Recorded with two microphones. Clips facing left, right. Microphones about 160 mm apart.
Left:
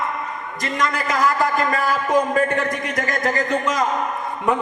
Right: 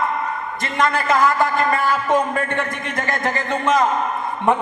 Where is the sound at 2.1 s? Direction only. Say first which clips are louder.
Left 4 dB; 25° right (ahead or behind).